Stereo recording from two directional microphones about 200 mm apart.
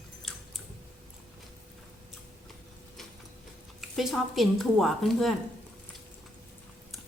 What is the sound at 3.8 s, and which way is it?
Speech, centre (ahead or behind).